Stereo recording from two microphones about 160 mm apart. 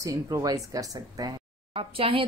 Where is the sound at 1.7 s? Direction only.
35° right (ahead or behind).